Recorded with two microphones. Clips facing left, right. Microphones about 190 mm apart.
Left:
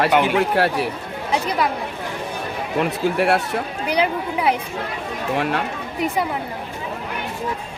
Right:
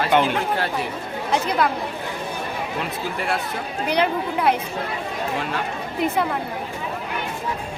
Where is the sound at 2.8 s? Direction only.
65° left (ahead or behind).